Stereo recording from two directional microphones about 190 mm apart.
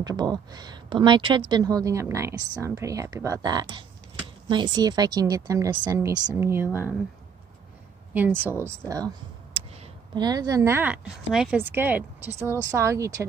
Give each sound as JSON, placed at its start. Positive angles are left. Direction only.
{"t": 0.0, "sound": "a woman's voice", "side_deg": -20}
{"t": 8.1, "sound": "a woman's voice", "side_deg": -10}